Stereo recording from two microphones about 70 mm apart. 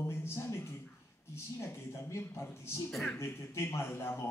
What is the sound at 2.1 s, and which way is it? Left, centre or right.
A man's voice, left.